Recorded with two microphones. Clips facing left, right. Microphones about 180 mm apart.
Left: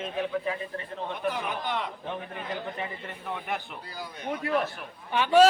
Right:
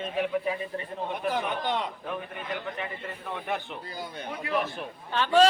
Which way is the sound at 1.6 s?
20° right (ahead or behind).